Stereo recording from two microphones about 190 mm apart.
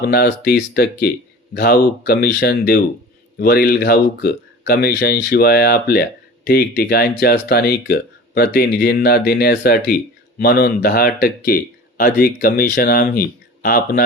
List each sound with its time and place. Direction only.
0.0 s speech: 55° left (ahead or behind)